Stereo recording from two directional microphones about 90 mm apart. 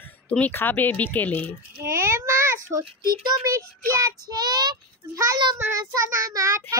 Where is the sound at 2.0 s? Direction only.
30° right (ahead or behind).